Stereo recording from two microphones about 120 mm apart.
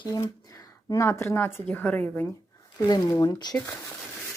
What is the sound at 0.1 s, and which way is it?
A woman's voice, 30° left (ahead or behind).